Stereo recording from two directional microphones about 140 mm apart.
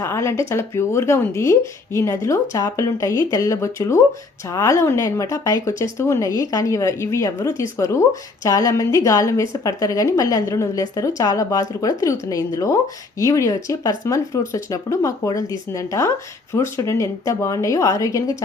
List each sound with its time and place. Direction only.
0.0 s a woman's voice: 20° left (ahead or behind)